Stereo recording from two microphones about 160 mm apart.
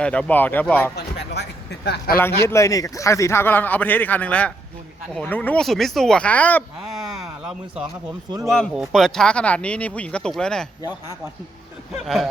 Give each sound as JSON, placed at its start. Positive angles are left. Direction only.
{"t": 0.0, "sound": "a man's voice", "side_deg": 5}
{"t": 0.9, "sound": "speech", "side_deg": 90}
{"t": 2.1, "sound": "a man's voice", "side_deg": 15}
{"t": 6.9, "sound": "a sound", "side_deg": 0}
{"t": 8.4, "sound": "speech", "side_deg": 5}
{"t": 12.0, "sound": "speech", "side_deg": 0}